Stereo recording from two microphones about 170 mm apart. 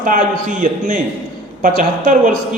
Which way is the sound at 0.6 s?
50° right (ahead or behind).